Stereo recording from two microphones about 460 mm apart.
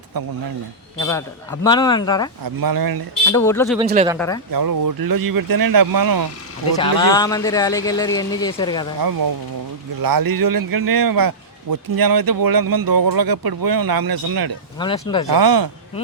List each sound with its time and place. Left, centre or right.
0.9 s speech: centre
2.4 s a man's voice: right
3.2 s a man's voice: centre
3.8 s speech: centre
4.5 s a man's voice: right
6.7 s speech: centre
9.0 s a man's voice: right
14.8 s speech: centre
15.3 s a man's voice: right